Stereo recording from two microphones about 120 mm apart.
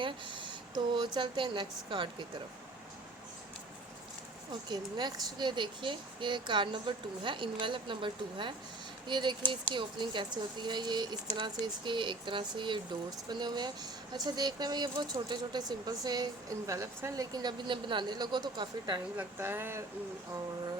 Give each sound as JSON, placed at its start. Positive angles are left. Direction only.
{"t": 0.0, "sound": "speech", "side_deg": -45}
{"t": 4.7, "sound": "speech", "side_deg": -35}
{"t": 19.1, "sound": "speech", "side_deg": -15}